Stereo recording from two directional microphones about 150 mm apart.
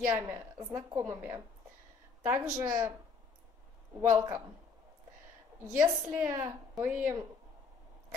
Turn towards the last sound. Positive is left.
turn(degrees=-15)  # may be behind; listen again after turning